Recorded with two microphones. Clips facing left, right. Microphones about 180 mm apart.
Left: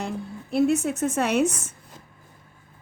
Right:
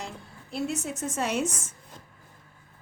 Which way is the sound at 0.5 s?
60° left (ahead or behind).